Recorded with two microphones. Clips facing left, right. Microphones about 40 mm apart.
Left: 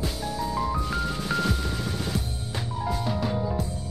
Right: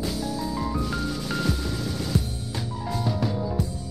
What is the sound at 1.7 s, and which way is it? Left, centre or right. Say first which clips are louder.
Music: right 1 dB; left.